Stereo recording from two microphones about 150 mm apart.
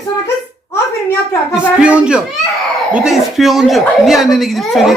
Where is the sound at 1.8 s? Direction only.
5° right (ahead or behind).